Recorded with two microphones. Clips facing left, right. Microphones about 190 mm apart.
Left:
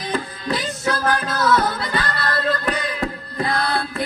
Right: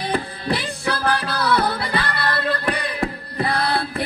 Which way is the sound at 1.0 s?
35° right (ahead or behind).